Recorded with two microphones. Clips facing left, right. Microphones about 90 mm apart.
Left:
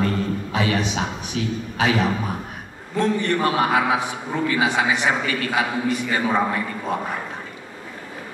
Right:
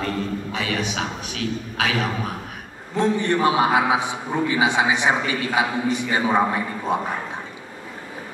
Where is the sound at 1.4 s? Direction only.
90° right.